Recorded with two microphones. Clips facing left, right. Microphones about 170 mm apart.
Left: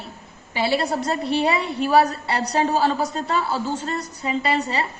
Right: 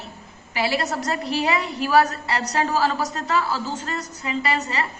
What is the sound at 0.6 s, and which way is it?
A woman's voice, 30° left (ahead or behind).